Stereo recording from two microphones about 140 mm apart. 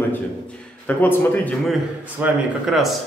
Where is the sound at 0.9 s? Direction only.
15° left (ahead or behind).